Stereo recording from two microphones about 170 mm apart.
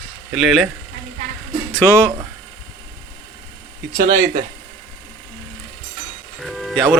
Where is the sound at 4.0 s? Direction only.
60° right (ahead or behind).